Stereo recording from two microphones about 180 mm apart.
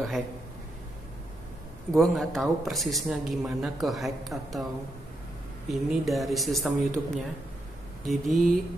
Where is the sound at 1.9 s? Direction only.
Centre (ahead or behind).